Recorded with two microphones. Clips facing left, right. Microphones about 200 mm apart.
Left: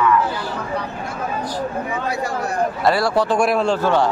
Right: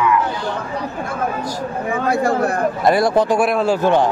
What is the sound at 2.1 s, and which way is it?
Speech, 50° right (ahead or behind).